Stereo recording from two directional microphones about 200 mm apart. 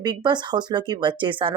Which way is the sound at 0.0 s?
20° right (ahead or behind).